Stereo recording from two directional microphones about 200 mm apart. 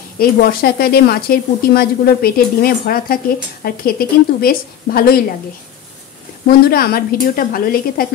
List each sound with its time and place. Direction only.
0.2 s speech: 45° left (ahead or behind)
6.7 s speech: 50° left (ahead or behind)